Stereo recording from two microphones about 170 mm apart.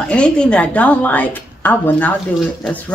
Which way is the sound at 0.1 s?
5° left (ahead or behind).